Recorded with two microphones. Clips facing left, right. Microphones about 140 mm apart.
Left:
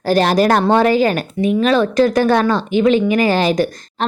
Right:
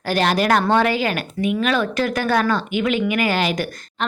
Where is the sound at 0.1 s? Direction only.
40° left (ahead or behind).